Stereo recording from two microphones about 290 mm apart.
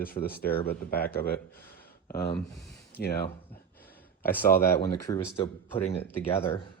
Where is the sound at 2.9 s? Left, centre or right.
Left.